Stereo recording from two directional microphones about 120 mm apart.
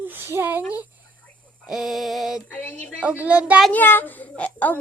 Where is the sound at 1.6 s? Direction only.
5° right (ahead or behind).